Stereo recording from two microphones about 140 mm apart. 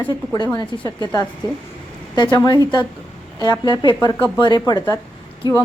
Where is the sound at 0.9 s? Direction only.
25° left (ahead or behind).